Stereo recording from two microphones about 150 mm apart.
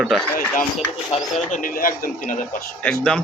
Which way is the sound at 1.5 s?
65° left (ahead or behind).